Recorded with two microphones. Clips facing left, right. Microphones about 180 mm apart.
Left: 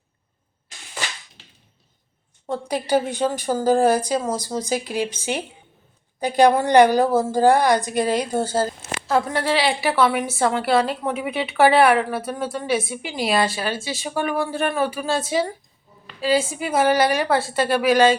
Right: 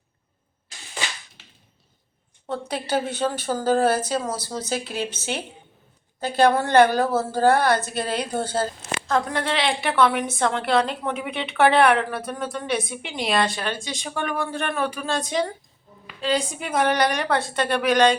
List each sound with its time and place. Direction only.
2.5 s a woman's voice: 10° left (ahead or behind)